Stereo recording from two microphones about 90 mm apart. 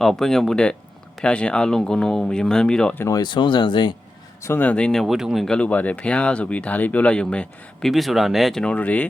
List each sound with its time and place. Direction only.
0.0 s speech: 5° left (ahead or behind)
3.1 s speech: 55° left (ahead or behind)
4.4 s speech: 20° left (ahead or behind); by 5.5 s 5° right (ahead or behind)
5.5 s speech: 15° left (ahead or behind)
8.6 s speech: 15° left (ahead or behind)